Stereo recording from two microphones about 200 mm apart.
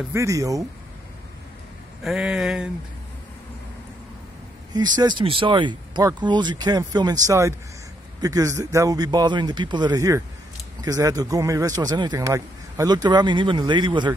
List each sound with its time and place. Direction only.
0.1 s speech: 15° right (ahead or behind)
2.0 s a sound: 5° right (ahead or behind)
4.7 s speech: 20° right (ahead or behind)